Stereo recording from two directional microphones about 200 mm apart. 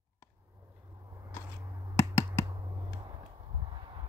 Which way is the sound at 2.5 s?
20° right (ahead or behind).